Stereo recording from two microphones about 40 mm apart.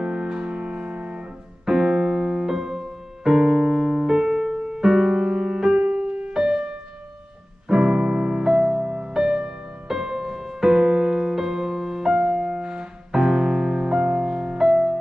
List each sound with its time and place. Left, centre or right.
0.0 s music: centre
1.7 s piano: centre
5.9 s music: right
6.3 s music: centre
7.6 s music: centre
13.1 s music: centre